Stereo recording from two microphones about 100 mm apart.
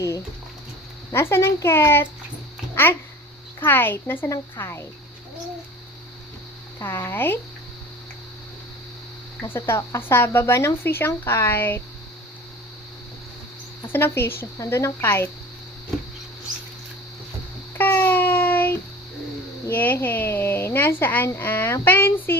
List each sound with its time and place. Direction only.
1.1 s speech: 25° left (ahead or behind)
6.7 s speech: 25° left (ahead or behind)
9.4 s speech: 20° left (ahead or behind)
13.9 s speech: 25° left (ahead or behind)
17.7 s a sound: 20° left (ahead or behind)
19.6 s speech: 20° left (ahead or behind)